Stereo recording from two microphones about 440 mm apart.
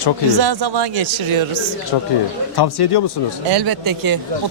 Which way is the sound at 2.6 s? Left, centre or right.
Left.